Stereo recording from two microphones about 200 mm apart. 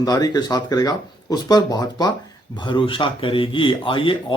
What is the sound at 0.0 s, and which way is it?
Speech, 20° left (ahead or behind).